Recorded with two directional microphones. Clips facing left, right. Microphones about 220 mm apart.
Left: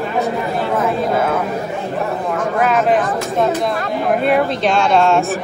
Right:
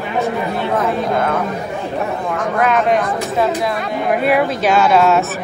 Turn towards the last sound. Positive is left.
turn(degrees=-5)  # may be behind; listen again after turning